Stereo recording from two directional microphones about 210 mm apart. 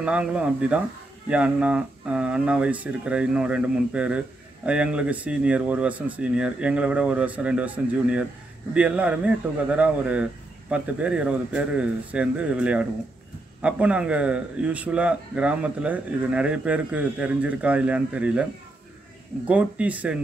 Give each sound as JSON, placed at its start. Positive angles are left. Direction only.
{"t": 0.0, "sound": "a man's voice", "side_deg": -5}